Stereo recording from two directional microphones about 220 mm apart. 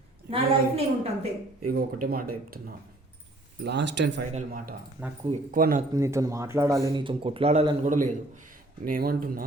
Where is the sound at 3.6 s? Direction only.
55° right (ahead or behind).